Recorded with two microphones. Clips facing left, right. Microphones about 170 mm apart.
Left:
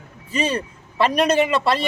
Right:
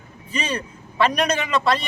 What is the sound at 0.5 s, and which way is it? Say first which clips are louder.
Speech: left 1 dB; 30° left (ahead or behind).